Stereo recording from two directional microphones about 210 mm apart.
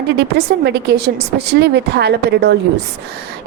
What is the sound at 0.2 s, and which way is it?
A woman's voice, 50° right (ahead or behind).